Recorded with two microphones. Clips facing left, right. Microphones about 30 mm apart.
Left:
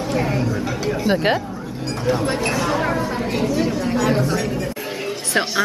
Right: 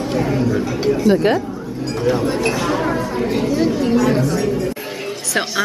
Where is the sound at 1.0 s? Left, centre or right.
Left.